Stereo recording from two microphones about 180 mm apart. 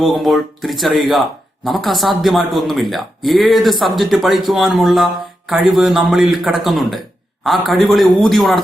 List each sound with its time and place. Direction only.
0.0 s speech: centre (ahead or behind)